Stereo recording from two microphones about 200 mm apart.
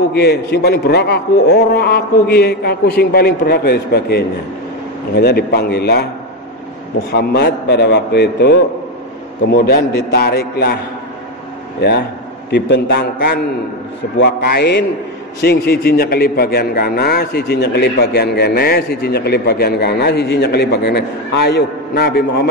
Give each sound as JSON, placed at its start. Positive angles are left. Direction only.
{"t": 0.1, "sound": "a man's voice", "side_deg": 55}
{"t": 7.1, "sound": "a man's voice", "side_deg": 55}
{"t": 11.8, "sound": "a man's voice", "side_deg": 60}